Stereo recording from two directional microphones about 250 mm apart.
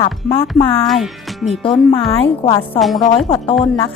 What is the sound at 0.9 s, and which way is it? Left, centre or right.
Speech, centre.